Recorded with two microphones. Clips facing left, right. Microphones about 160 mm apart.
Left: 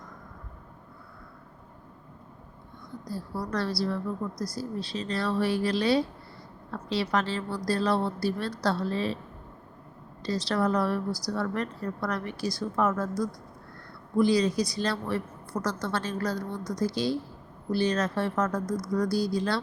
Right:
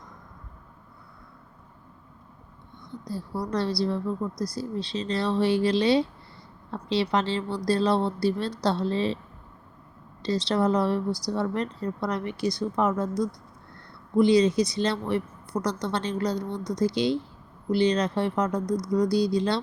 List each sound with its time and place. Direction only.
3.1 s a woman's voice: 25° right (ahead or behind)
10.2 s a woman's voice: 20° right (ahead or behind)